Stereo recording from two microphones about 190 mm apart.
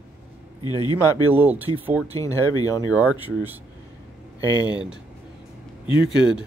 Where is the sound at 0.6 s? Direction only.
20° left (ahead or behind).